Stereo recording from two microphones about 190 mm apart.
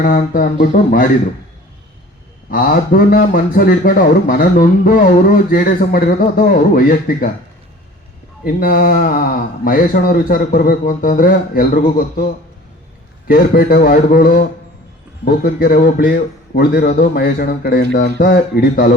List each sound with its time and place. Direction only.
0.0 s speech: 45° left (ahead or behind)
2.5 s speech: 50° left (ahead or behind)
8.4 s speech: 50° left (ahead or behind)
13.2 s speech: 50° left (ahead or behind)